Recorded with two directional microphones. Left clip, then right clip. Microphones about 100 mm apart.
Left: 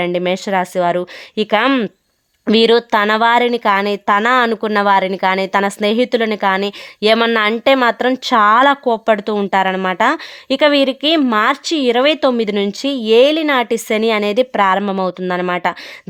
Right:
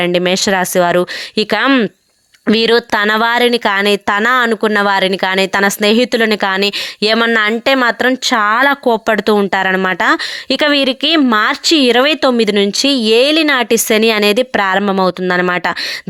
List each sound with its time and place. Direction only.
0.0 s speech: 30° right (ahead or behind)
8.1 s speech: 15° right (ahead or behind)
8.8 s speech: 45° right (ahead or behind)